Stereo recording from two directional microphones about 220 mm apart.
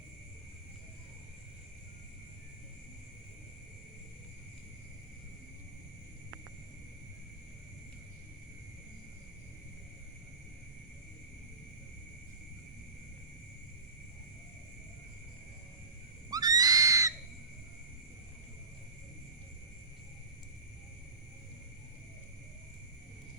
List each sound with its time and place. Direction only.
16.3 s screaming: 15° right (ahead or behind)